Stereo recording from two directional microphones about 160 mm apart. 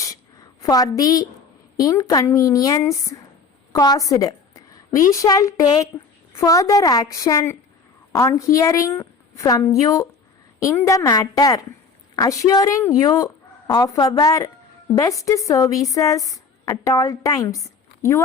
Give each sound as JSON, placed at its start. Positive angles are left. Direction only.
{"t": 0.6, "sound": "a woman's voice", "side_deg": 20}